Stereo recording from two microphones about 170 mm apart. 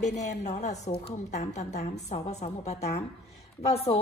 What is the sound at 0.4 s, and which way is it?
A woman's voice, 40° left (ahead or behind).